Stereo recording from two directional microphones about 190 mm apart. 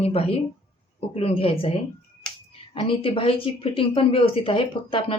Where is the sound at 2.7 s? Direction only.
30° left (ahead or behind).